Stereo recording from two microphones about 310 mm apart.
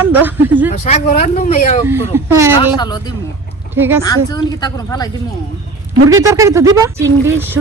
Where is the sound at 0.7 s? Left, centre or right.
Left.